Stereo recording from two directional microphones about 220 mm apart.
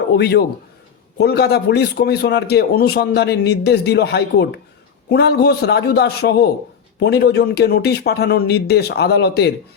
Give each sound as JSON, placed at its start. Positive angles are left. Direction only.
{"t": 0.2, "sound": "a man's voice", "side_deg": 45}